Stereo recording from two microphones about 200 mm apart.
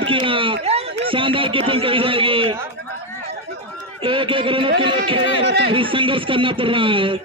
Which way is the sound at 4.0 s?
25° right (ahead or behind).